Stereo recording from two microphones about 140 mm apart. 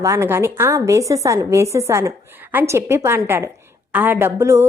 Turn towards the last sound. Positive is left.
turn(degrees=-20)  # may be behind; listen again after turning